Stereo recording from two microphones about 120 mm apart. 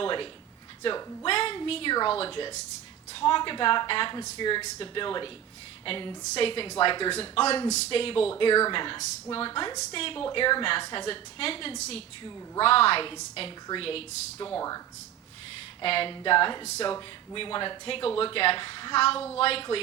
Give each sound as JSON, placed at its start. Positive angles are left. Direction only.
{"t": 0.0, "sound": "a sound", "side_deg": 45}
{"t": 0.8, "sound": "speech", "side_deg": 45}
{"t": 7.1, "sound": "a man's voice", "side_deg": 60}
{"t": 11.8, "sound": "a man's voice", "side_deg": 65}
{"t": 14.3, "sound": "speech", "side_deg": 30}
{"t": 15.8, "sound": "speech", "side_deg": 50}